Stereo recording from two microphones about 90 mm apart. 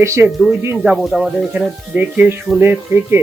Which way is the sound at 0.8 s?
5° right (ahead or behind).